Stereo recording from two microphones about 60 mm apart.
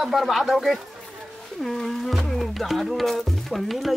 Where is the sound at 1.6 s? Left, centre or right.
Centre.